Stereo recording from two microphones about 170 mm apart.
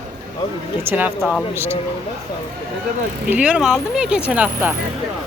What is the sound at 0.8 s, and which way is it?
Speech, 10° right (ahead or behind).